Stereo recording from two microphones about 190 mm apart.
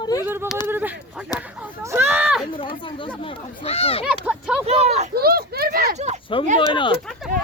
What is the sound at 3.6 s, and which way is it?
Speech, 30° left (ahead or behind).